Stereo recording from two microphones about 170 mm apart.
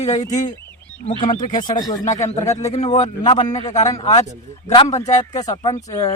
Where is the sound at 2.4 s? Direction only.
40° left (ahead or behind).